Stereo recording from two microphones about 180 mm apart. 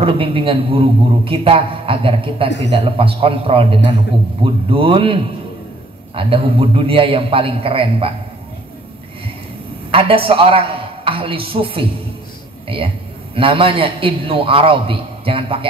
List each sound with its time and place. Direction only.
0.0 s a man's voice: 30° right (ahead or behind)
9.8 s a man's voice: 30° right (ahead or behind)